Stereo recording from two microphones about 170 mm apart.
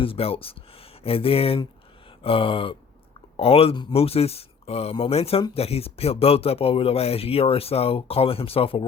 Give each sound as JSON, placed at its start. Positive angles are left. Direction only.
{"t": 0.0, "sound": "speech", "side_deg": 35}
{"t": 2.0, "sound": "a sound", "side_deg": 30}
{"t": 3.3, "sound": "speech", "side_deg": 35}